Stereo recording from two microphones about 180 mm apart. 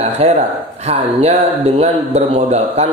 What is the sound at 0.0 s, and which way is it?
Speech, 35° right (ahead or behind).